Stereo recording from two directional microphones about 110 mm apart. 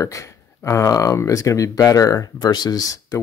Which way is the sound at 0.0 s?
30° left (ahead or behind).